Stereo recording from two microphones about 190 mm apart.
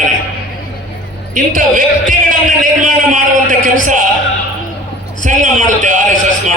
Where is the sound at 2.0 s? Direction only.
45° right (ahead or behind).